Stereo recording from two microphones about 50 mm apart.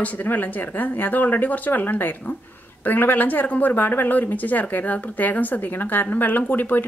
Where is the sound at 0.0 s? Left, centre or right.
Left.